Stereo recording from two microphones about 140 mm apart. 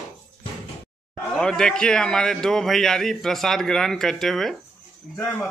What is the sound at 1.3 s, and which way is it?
A man's voice, 5° left (ahead or behind).